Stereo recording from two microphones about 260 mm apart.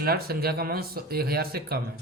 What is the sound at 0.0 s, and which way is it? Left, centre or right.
Speech, right.